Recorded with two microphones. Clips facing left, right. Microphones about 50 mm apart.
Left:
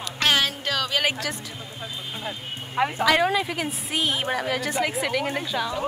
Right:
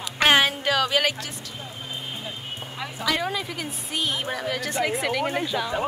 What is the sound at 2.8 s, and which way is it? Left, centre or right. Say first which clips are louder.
Speech: left 13 dB; left.